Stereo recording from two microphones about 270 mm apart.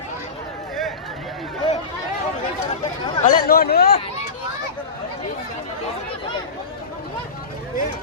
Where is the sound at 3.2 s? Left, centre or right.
Left.